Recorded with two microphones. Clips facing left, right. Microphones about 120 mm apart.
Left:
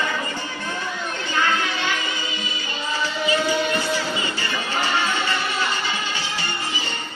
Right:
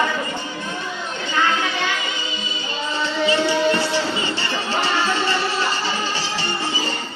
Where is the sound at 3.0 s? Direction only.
30° right (ahead or behind).